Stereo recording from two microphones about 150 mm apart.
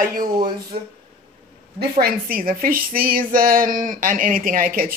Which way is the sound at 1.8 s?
85° right.